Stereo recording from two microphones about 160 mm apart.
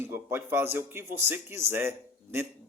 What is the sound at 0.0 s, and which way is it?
Speech, 15° right (ahead or behind).